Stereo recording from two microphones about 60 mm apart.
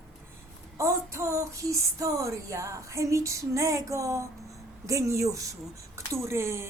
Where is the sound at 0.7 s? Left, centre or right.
Right.